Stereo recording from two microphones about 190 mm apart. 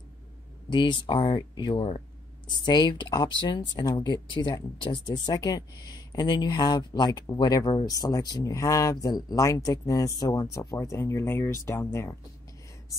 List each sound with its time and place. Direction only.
0.7 s speech: 25° left (ahead or behind)